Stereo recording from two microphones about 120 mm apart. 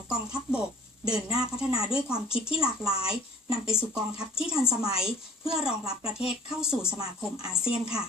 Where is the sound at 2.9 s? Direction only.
50° left (ahead or behind).